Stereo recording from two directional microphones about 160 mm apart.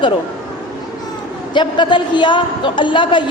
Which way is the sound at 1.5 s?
30° left (ahead or behind).